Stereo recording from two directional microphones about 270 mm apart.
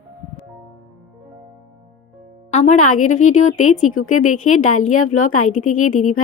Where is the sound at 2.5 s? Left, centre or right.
Left.